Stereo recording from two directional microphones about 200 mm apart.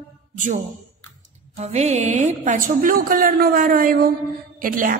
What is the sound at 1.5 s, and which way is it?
A woman's voice, 35° right (ahead or behind).